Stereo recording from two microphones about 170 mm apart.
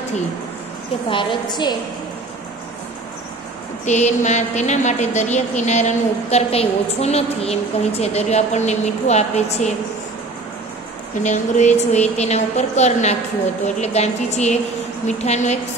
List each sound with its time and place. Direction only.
1.0 s a woman's voice: 25° left (ahead or behind)
3.8 s a woman's voice: 45° left (ahead or behind)
11.2 s a woman's voice: 45° left (ahead or behind)